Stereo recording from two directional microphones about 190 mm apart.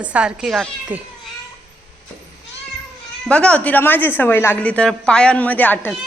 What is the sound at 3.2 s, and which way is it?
A woman's voice, 5° left (ahead or behind).